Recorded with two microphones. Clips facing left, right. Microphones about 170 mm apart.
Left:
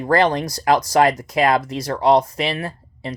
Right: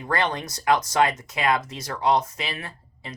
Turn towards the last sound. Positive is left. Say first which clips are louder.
# left 10 dB
turn(degrees=35)  # may be behind; listen again after turning